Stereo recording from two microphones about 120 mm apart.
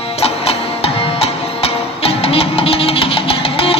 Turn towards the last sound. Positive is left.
turn(degrees=50)  # may be behind; listen again after turning